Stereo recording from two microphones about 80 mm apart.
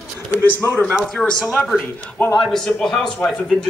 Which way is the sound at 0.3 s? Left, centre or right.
Left.